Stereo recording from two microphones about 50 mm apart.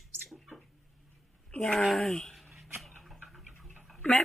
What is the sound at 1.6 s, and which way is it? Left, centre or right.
Speech, centre.